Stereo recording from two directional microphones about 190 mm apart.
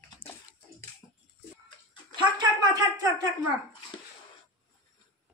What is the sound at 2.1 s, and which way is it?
Speech, 25° right (ahead or behind).